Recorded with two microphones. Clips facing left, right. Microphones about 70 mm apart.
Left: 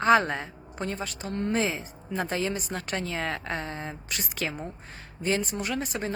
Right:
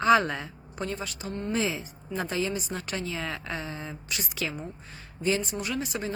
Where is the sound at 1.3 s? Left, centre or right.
Left.